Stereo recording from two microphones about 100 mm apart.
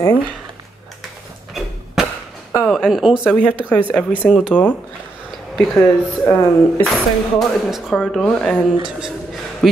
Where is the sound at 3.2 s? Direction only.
10° left (ahead or behind).